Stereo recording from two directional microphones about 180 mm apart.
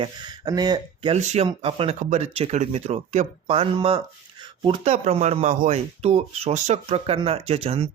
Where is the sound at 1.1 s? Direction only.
40° right (ahead or behind).